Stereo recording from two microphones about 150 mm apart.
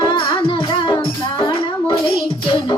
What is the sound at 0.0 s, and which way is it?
Music, 30° left (ahead or behind).